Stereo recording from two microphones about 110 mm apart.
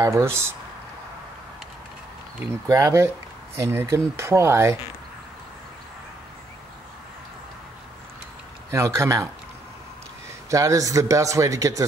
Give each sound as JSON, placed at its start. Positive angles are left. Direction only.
{"t": 0.0, "sound": "speech", "side_deg": -25}
{"t": 2.7, "sound": "speech", "side_deg": -30}
{"t": 8.7, "sound": "speech", "side_deg": -25}
{"t": 10.5, "sound": "speech", "side_deg": -30}